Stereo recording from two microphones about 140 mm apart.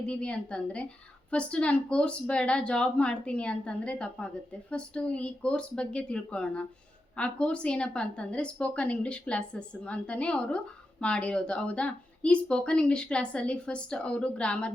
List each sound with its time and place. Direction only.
0.1 s a woman's voice: 5° left (ahead or behind)